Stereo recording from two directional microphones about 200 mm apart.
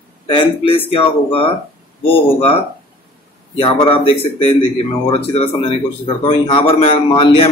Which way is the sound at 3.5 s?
25° left (ahead or behind).